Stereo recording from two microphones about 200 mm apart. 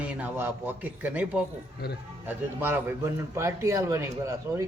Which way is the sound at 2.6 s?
10° right (ahead or behind).